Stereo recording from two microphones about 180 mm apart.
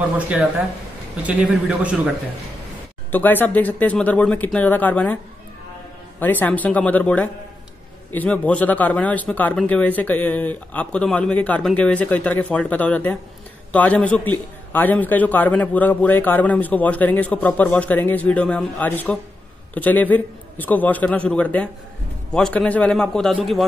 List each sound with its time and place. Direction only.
1.2 s a man's voice: 5° right (ahead or behind)
3.1 s a man's voice: 10° left (ahead or behind)